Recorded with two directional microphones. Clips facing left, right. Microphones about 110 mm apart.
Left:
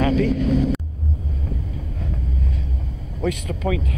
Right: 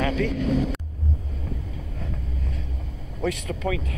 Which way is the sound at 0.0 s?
35° left (ahead or behind).